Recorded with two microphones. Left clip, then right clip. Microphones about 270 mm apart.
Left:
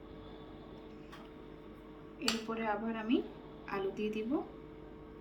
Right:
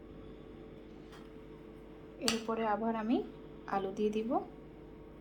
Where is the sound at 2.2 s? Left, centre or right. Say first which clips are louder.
Right 2 dB; right.